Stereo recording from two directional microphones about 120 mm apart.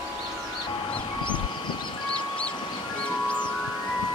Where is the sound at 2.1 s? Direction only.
10° left (ahead or behind).